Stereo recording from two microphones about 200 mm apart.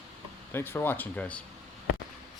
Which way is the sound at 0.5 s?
10° left (ahead or behind).